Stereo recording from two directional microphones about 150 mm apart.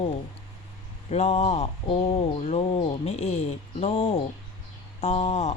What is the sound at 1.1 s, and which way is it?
Speech, 45° left (ahead or behind).